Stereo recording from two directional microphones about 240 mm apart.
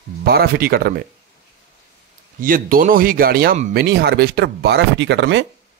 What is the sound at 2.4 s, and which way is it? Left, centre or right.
Speech, right.